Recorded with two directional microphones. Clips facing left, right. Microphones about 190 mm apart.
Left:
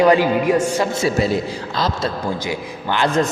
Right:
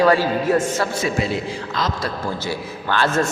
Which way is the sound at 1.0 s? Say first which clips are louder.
Left 4 dB; 40° left (ahead or behind).